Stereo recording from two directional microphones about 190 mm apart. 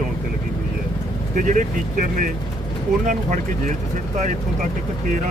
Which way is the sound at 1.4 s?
40° right (ahead or behind).